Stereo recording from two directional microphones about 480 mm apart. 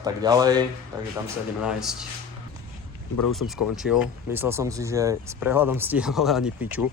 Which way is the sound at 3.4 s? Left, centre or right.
Left.